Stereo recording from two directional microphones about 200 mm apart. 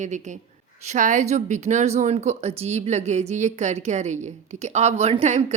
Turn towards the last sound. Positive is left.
turn(degrees=-35)  # may be behind; listen again after turning